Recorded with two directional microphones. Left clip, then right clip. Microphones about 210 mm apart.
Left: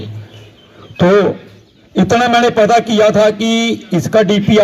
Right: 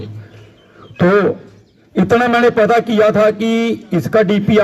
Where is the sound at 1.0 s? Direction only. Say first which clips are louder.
Left 2 dB; 45° left (ahead or behind).